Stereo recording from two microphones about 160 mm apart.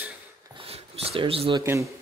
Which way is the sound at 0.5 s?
35° right (ahead or behind).